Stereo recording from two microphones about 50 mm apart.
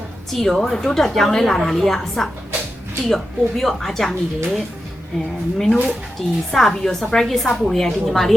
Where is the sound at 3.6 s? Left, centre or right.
Centre.